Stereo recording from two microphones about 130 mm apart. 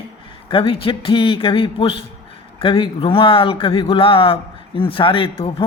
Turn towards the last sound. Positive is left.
turn(degrees=45)  # may be behind; listen again after turning